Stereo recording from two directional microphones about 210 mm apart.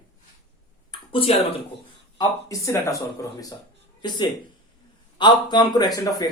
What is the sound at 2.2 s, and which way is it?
Speech, 15° left (ahead or behind).